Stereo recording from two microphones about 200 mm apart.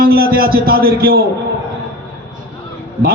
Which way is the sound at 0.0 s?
50° right (ahead or behind).